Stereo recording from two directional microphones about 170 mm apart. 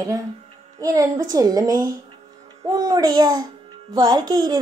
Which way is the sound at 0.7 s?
20° right (ahead or behind).